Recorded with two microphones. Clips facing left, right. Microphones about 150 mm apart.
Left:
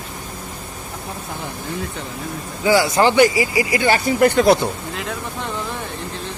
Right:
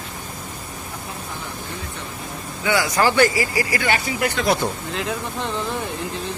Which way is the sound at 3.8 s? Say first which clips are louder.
Left 7 dB; 40° left (ahead or behind).